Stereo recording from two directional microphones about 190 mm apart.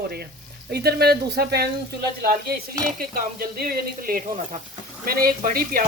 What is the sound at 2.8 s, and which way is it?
Sizzle, 50° right (ahead or behind).